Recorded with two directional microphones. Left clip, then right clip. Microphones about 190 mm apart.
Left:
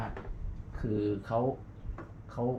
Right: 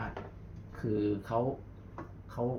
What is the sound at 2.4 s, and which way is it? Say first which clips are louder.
Speech: left 1 dB; 20° left (ahead or behind).